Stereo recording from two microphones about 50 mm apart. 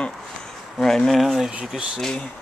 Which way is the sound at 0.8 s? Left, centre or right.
Centre.